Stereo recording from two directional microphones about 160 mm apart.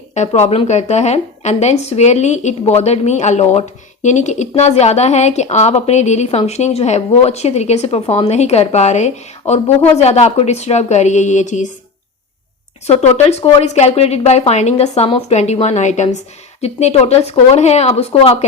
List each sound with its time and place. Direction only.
0.1 s speech: 45° left (ahead or behind)
12.9 s a woman's voice: 45° left (ahead or behind)